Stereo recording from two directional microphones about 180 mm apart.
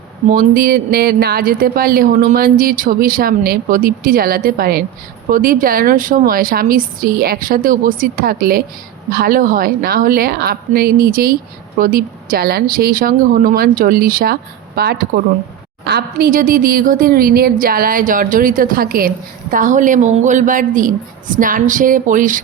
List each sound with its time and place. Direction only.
0.3 s speech: 50° right (ahead or behind)